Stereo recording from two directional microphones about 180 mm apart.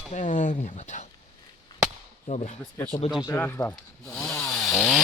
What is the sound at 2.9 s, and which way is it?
Speech, 20° left (ahead or behind).